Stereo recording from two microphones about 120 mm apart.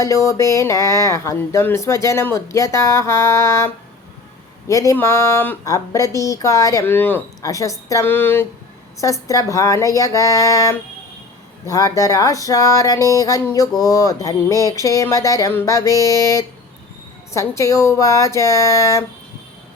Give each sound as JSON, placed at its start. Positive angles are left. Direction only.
{"t": 0.0, "sound": "speech", "side_deg": 25}
{"t": 4.7, "sound": "speech", "side_deg": 25}
{"t": 6.8, "sound": "speech", "side_deg": 15}
{"t": 7.4, "sound": "speech", "side_deg": 25}
{"t": 9.2, "sound": "speech", "side_deg": 30}